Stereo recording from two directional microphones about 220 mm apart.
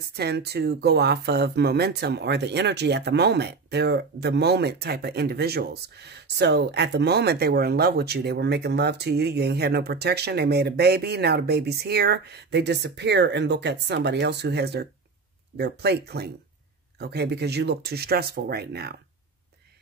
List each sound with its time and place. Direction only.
0.1 s speech: 45° right (ahead or behind)